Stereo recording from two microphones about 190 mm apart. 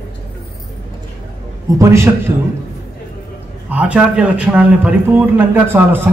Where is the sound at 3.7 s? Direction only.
5° right (ahead or behind).